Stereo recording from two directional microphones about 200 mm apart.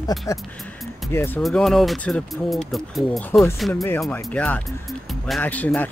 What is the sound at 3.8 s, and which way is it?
Speech, 15° left (ahead or behind).